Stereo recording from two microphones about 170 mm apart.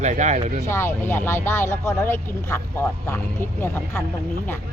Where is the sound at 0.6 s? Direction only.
15° left (ahead or behind).